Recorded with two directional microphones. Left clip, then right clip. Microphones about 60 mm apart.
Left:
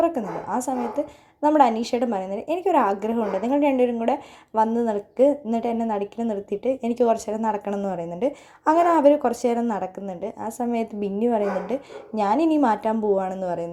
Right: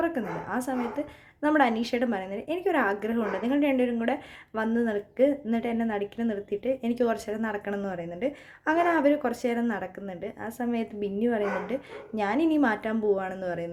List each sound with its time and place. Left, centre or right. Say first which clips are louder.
0.0 s a woman's voice: left 6 dB; centre
6.5 s a woman's voice: left 4 dB; left
7.9 s a woman's voice: left 6 dB; left
9.0 s a woman's voice: left 7 dB; left